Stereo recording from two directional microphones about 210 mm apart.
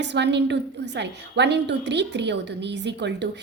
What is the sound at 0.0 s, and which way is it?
A woman's voice, 55° right (ahead or behind).